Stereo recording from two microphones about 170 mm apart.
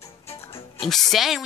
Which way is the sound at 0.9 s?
Centre (ahead or behind).